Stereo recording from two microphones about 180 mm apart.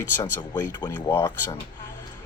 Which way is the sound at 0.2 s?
20° left (ahead or behind).